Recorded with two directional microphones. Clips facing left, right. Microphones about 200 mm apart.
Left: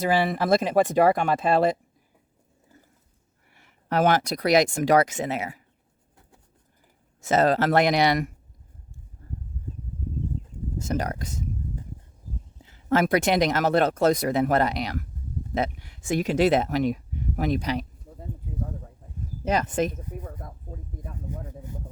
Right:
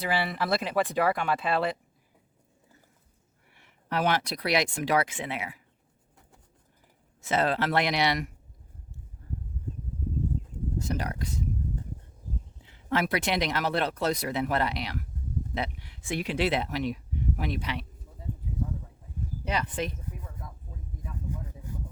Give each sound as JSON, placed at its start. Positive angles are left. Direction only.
{"t": 0.0, "sound": "speech", "side_deg": 45}
{"t": 3.5, "sound": "speech", "side_deg": 40}
{"t": 7.2, "sound": "speech", "side_deg": 45}
{"t": 10.8, "sound": "speech", "side_deg": 45}
{"t": 12.6, "sound": "speech", "side_deg": 45}
{"t": 19.5, "sound": "a sound", "side_deg": 45}